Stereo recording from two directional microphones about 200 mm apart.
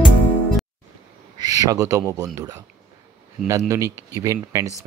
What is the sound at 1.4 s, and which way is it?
Speech, 20° right (ahead or behind).